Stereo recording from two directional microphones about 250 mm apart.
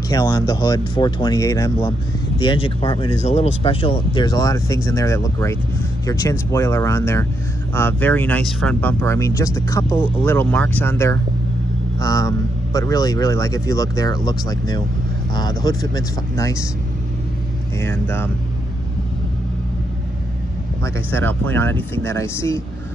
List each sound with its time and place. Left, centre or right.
0.1 s speech: centre
17.8 s speech: centre
20.8 s speech: centre